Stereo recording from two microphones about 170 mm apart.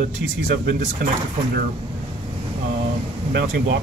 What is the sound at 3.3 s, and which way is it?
Speech, 75° right (ahead or behind).